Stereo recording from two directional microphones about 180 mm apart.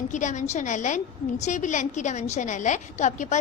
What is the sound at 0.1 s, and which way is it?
A woman's voice, 45° left (ahead or behind).